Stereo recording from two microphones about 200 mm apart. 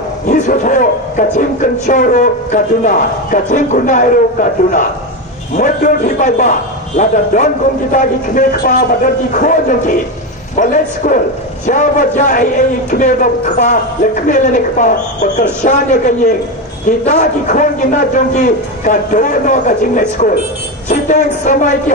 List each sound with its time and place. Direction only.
0.3 s a man's voice: 40° left (ahead or behind)
7.9 s a man's voice: 45° left (ahead or behind)